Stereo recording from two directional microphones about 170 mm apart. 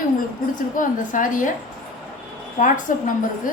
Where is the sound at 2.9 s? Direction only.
50° left (ahead or behind).